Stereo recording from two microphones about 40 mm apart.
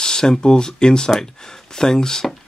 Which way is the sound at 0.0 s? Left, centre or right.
Centre.